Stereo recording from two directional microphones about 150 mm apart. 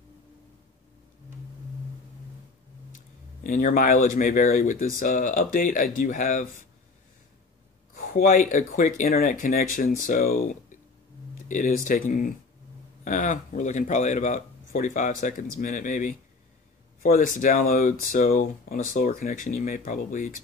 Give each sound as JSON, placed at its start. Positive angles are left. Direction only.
{"t": 3.4, "sound": "speech", "side_deg": 60}
{"t": 8.0, "sound": "speech", "side_deg": 65}